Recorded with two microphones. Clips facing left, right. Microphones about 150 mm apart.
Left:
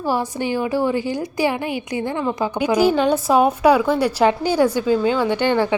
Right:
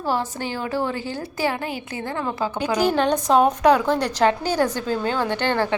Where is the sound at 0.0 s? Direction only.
10° left (ahead or behind).